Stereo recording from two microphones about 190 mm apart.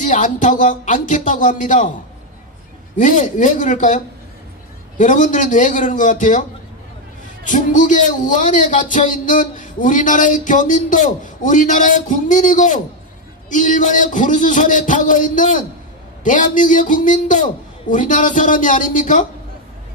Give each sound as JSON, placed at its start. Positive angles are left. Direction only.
{"t": 0.0, "sound": "a man's voice", "side_deg": 40}
{"t": 3.0, "sound": "a man's voice", "side_deg": 45}
{"t": 7.4, "sound": "a man's voice", "side_deg": 45}